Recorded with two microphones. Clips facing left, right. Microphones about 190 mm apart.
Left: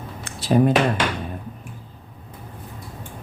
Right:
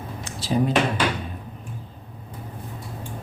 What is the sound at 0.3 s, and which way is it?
Speech, 55° left (ahead or behind).